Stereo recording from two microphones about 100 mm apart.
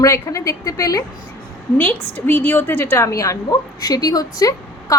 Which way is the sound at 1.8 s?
15° left (ahead or behind).